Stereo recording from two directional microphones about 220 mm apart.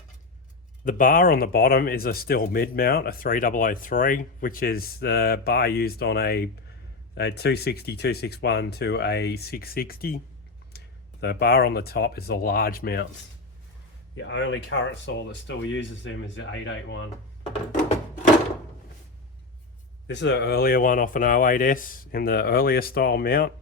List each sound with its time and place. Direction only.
0.9 s speech: 40° left (ahead or behind)
11.2 s speech: 45° left (ahead or behind)
14.2 s speech: 55° left (ahead or behind)
20.1 s speech: 50° left (ahead or behind)